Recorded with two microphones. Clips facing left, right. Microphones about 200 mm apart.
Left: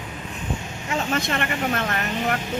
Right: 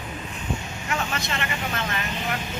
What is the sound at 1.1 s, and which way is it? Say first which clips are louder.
Speech: left 5 dB; 50° left (ahead or behind).